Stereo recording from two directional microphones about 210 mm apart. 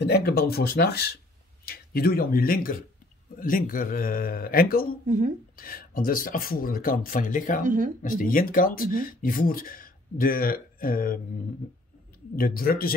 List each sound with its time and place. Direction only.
0.0 s speech: 50° left (ahead or behind)
5.0 s speech: 35° right (ahead or behind)
5.6 s speech: 45° left (ahead or behind)
7.6 s speech: 40° right (ahead or behind)
8.0 s speech: 40° left (ahead or behind)
12.4 s speech: 45° left (ahead or behind)